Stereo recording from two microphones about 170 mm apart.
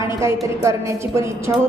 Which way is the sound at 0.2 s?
15° right (ahead or behind).